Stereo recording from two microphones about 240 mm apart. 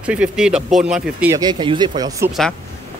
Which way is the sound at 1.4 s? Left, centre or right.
Centre.